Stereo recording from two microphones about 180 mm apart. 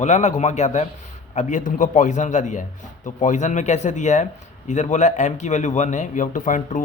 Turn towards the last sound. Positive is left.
turn(degrees=45)  # may be behind; listen again after turning